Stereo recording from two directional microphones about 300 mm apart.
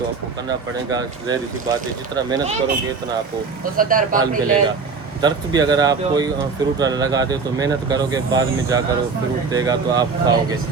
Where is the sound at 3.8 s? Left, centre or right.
Right.